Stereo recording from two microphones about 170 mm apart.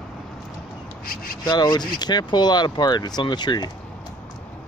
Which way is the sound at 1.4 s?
25° left (ahead or behind).